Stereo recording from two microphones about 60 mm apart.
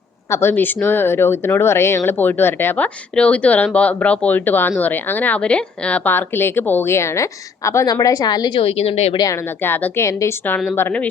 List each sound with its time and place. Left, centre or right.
0.3 s a woman's voice: left
0.5 s a woman's voice: left
2.0 s speech: left
4.4 s speech: left
5.4 s speech: centre
6.1 s speech: left
6.9 s a woman's voice: left
7.9 s a woman's voice: left
9.6 s speech: left
10.0 s a woman's voice: left
10.8 s speech: left